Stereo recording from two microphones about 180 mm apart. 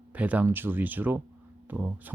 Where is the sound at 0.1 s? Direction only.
10° right (ahead or behind).